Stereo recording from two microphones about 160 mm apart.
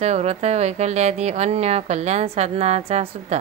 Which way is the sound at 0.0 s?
45° right (ahead or behind).